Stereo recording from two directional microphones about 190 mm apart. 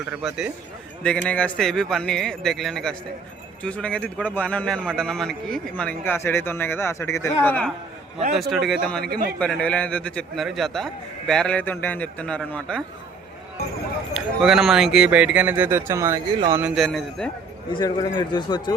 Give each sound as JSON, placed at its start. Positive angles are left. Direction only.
{"t": 0.1, "sound": "a man's voice", "side_deg": -5}
{"t": 1.0, "sound": "a man's voice", "side_deg": 5}
{"t": 9.0, "sound": "a man's voice", "side_deg": -50}
{"t": 9.4, "sound": "a man's voice", "side_deg": 5}
{"t": 14.1, "sound": "speech", "side_deg": 0}
{"t": 16.6, "sound": "a man's voice", "side_deg": 0}
{"t": 17.7, "sound": "a man's voice", "side_deg": 25}